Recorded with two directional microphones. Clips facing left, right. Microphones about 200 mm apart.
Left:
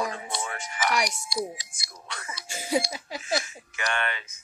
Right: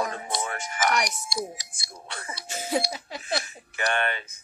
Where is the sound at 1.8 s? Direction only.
30° right (ahead or behind).